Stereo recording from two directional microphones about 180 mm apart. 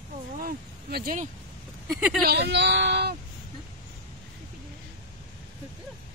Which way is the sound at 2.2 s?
65° right (ahead or behind).